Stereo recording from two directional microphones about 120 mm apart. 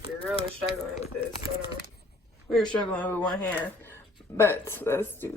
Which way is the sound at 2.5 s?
5° left (ahead or behind).